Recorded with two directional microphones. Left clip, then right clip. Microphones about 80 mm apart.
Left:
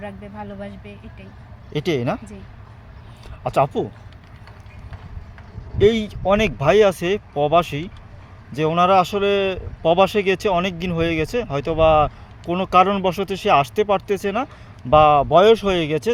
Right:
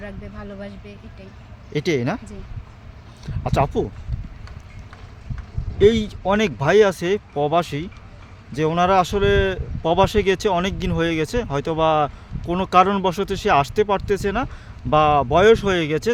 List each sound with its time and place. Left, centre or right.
0.0 s speech: right
5.8 s speech: right